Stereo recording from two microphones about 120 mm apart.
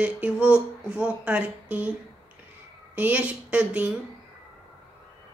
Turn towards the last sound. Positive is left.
turn(degrees=-10)  # may be behind; listen again after turning